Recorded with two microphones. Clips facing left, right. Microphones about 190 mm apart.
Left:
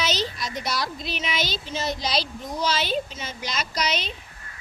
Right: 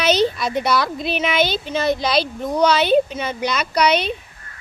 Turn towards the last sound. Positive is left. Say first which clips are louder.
# right 10 dB
turn(degrees=-60)  # may be behind; listen again after turning